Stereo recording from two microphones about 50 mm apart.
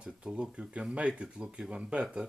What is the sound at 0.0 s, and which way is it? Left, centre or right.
Speech, right.